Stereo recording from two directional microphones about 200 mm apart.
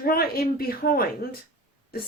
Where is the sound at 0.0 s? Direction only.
50° left (ahead or behind).